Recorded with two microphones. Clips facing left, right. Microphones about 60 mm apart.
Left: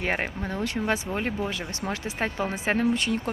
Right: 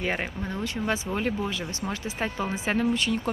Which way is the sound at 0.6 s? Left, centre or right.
Left.